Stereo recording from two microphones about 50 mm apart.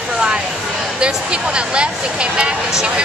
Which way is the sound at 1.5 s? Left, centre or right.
Centre.